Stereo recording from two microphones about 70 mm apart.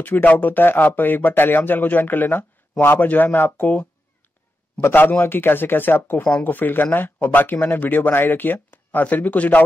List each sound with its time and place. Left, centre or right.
0.0 s speech: left